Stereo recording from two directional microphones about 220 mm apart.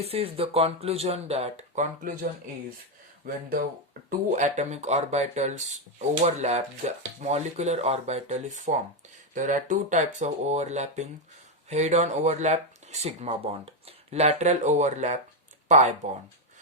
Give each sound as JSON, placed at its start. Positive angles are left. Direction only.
{"t": 0.0, "sound": "speech", "side_deg": -25}
{"t": 3.2, "sound": "speech", "side_deg": -40}